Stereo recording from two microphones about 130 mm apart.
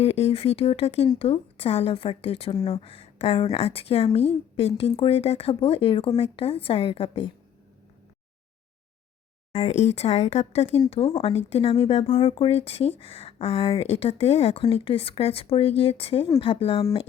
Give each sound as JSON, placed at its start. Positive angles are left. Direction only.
{"t": 0.0, "sound": "speech", "side_deg": 50}
{"t": 9.5, "sound": "speech", "side_deg": 55}